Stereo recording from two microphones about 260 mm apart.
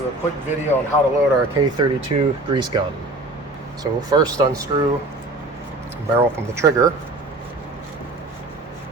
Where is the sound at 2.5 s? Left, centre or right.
Centre.